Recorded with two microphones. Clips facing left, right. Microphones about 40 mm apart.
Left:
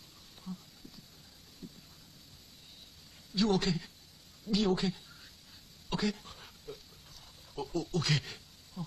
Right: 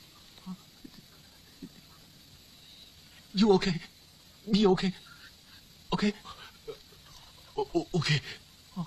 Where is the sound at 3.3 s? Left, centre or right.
Right.